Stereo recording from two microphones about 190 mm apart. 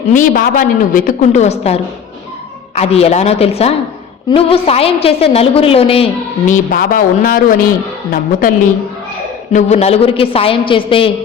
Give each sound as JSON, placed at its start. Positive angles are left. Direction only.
{"t": 0.1, "sound": "a woman's voice", "side_deg": 45}
{"t": 6.5, "sound": "a woman's voice", "side_deg": 45}